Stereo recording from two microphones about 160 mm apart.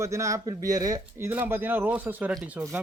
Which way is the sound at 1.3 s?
10° right (ahead or behind).